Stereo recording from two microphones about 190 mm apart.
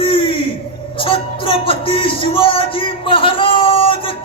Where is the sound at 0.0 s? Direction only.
30° left (ahead or behind).